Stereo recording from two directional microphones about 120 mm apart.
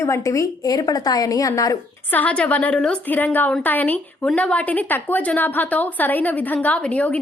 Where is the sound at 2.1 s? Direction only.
10° left (ahead or behind).